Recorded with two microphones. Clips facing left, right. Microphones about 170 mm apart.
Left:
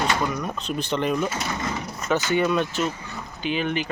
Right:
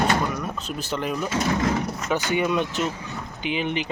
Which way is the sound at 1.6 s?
90° right.